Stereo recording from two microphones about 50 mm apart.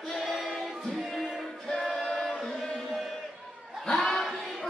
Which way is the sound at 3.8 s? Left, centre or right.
Centre.